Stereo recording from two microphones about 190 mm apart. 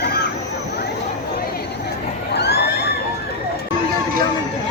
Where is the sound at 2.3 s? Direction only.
60° left (ahead or behind).